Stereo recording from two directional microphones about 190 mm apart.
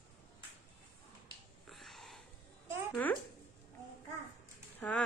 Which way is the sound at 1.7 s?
Centre (ahead or behind).